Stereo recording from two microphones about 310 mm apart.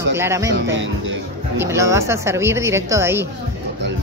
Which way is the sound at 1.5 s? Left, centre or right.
Centre.